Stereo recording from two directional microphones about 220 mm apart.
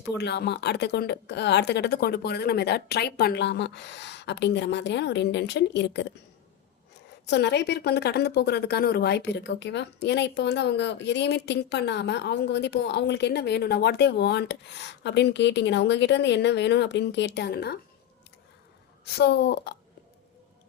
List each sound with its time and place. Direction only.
0.1 s a woman's voice: 50° left (ahead or behind)
7.3 s a woman's voice: 50° left (ahead or behind)
19.1 s a woman's voice: 50° left (ahead or behind)